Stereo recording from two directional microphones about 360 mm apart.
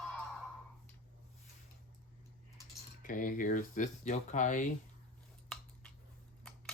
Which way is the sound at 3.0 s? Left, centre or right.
Left.